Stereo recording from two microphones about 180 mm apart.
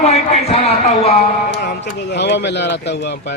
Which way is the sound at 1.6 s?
70° left (ahead or behind).